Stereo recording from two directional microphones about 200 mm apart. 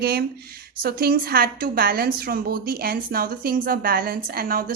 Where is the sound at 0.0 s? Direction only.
50° right (ahead or behind).